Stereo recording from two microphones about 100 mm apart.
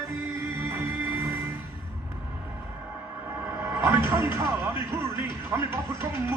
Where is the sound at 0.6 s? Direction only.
20° right (ahead or behind).